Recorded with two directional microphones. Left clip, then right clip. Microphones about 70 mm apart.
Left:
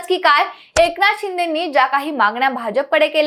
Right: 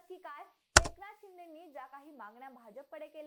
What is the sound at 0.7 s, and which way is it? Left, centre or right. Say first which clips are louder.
Hands: left 12 dB; centre.